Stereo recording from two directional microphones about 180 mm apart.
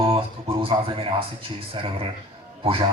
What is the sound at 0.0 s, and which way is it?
Speech, 30° right (ahead or behind).